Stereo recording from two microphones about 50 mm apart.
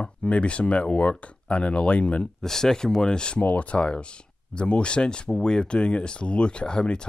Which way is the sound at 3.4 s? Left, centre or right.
Left.